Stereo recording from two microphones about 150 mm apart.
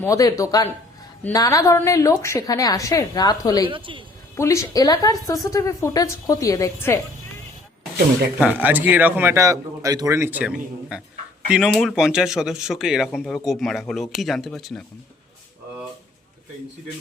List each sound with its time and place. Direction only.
0.0 s a woman's voice: 20° left (ahead or behind)
3.6 s a woman's voice: 35° right (ahead or behind)
4.4 s a woman's voice: 20° left (ahead or behind)
8.4 s a man's voice: 10° right (ahead or behind)